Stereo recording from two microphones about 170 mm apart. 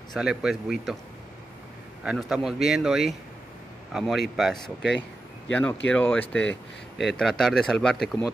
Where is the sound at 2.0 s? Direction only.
5° right (ahead or behind).